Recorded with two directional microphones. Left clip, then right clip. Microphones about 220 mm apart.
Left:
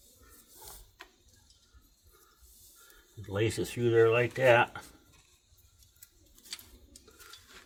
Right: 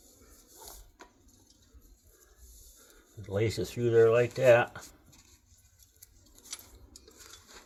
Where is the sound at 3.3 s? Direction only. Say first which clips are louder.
Even; 15° left (ahead or behind).